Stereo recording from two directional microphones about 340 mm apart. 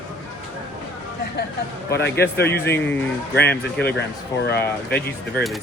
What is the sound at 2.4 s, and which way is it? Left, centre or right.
Speech, centre.